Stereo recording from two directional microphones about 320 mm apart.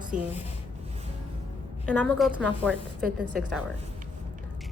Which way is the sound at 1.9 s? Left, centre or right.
Centre.